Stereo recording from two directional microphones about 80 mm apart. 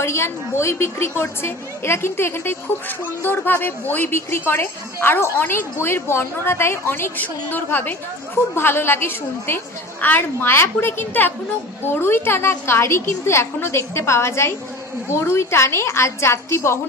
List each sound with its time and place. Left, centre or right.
0.0 s a woman's voice: left